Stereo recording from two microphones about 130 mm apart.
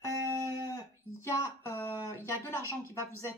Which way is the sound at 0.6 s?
25° left (ahead or behind).